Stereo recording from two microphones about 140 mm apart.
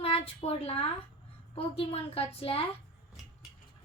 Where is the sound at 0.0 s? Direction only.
45° left (ahead or behind).